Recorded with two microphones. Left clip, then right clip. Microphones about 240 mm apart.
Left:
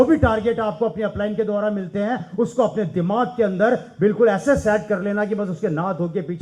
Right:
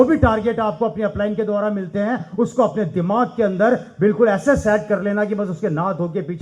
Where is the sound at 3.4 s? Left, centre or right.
Right.